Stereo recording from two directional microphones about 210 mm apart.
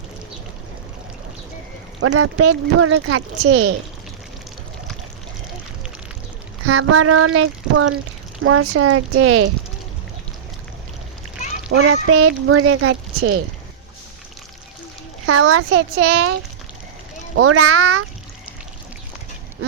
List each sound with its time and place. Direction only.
2.0 s speech: 90° right
6.7 s speech: 90° right
11.8 s speech: 80° right
15.3 s speech: 90° right
17.3 s speech: 90° right